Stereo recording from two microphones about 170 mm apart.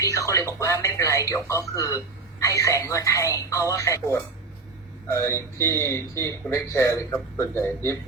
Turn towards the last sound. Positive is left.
turn(degrees=15)  # may be behind; listen again after turning